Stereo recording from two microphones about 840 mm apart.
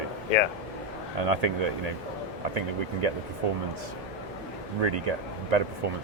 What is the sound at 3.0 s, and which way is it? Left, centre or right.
Speech, right.